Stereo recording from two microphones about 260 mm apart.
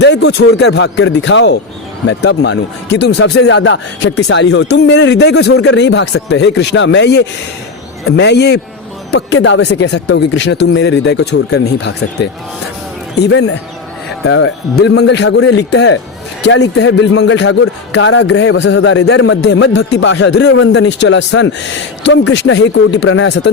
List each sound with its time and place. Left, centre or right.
0.0 s a man's voice: left